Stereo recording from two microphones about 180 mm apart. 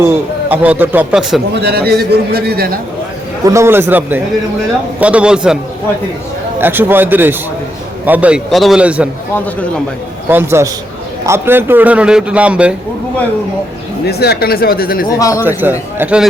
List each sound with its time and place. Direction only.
0.0 s a man's voice: 10° right (ahead or behind)
1.6 s a man's voice: 60° right (ahead or behind)
3.4 s a man's voice: 15° right (ahead or behind)
6.6 s a man's voice: 10° right (ahead or behind)
10.2 s a man's voice: 10° right (ahead or behind)
14.0 s speech: 60° left (ahead or behind)
15.4 s a man's voice: 10° right (ahead or behind)